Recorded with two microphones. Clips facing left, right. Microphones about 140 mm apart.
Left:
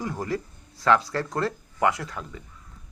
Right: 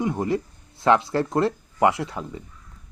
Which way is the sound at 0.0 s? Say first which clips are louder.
Right 6 dB; 20° right (ahead or behind).